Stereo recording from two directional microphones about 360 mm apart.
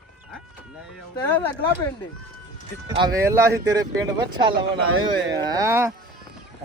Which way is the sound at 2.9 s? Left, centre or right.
Centre.